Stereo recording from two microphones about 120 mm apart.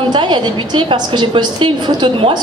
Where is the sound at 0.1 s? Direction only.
40° right (ahead or behind).